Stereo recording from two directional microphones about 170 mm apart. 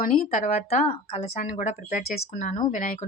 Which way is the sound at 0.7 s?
40° left (ahead or behind).